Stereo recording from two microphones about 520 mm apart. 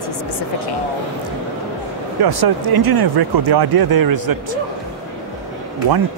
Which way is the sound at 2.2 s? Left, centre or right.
Right.